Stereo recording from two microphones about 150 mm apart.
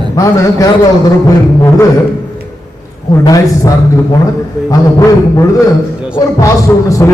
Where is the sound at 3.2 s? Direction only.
25° left (ahead or behind).